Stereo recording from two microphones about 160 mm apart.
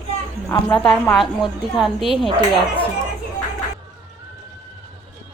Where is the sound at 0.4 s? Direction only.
15° left (ahead or behind).